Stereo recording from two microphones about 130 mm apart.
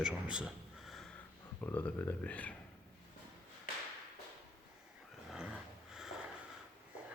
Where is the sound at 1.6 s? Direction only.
15° left (ahead or behind).